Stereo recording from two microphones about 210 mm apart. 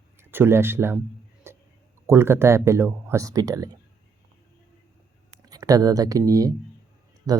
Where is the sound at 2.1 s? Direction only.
10° right (ahead or behind).